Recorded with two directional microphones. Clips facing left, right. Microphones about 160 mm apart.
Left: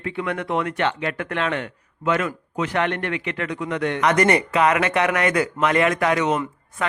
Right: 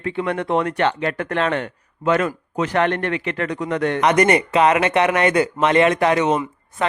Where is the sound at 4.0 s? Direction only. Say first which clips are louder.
Right 2 dB; 20° right (ahead or behind).